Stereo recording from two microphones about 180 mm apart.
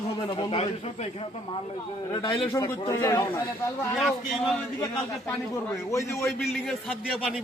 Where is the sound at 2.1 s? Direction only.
25° left (ahead or behind).